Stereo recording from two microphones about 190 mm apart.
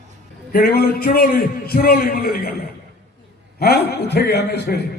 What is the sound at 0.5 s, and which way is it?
A man's voice, 55° left (ahead or behind).